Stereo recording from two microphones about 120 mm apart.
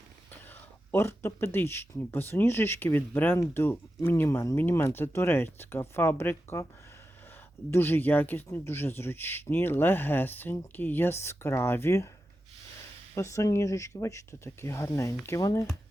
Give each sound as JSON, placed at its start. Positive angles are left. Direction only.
{"t": 0.9, "sound": "speech", "side_deg": 20}
{"t": 7.7, "sound": "speech", "side_deg": 20}
{"t": 13.1, "sound": "speech", "side_deg": 25}